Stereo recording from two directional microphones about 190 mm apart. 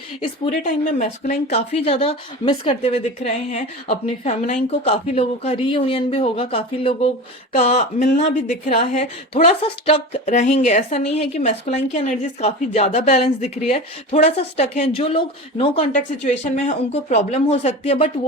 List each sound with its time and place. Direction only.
0.2 s speech: 40° left (ahead or behind)